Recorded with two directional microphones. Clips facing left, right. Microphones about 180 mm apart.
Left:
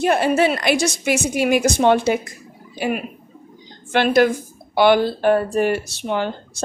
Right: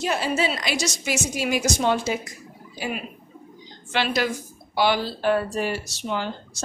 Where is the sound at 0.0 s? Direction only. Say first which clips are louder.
Left 7 dB; 60° left (ahead or behind).